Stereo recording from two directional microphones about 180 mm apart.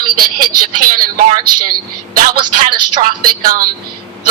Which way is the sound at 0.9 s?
45° right (ahead or behind).